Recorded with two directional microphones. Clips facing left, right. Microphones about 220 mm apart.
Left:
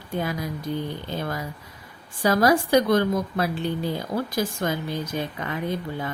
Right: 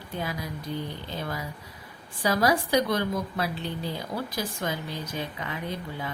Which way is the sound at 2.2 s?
50° left (ahead or behind).